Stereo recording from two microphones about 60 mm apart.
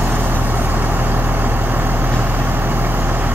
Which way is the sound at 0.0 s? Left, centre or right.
Right.